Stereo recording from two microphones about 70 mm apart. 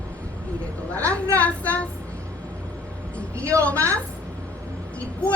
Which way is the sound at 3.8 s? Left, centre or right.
Right.